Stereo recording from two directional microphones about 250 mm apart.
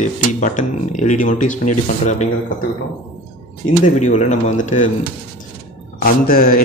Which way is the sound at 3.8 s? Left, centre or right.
Left.